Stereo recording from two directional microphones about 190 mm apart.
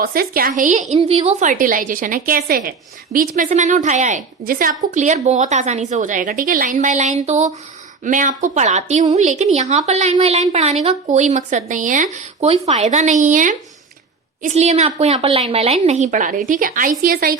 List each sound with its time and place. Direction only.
0.0 s a woman's voice: 50° right (ahead or behind)